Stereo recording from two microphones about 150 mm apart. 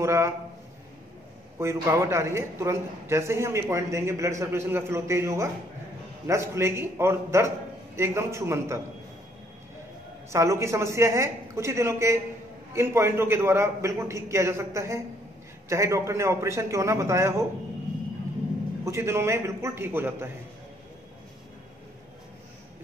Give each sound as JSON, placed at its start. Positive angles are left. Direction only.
{"t": 0.0, "sound": "a man's voice", "side_deg": -20}
{"t": 1.6, "sound": "a man's voice", "side_deg": -20}
{"t": 10.3, "sound": "a man's voice", "side_deg": -20}
{"t": 18.9, "sound": "a man's voice", "side_deg": -20}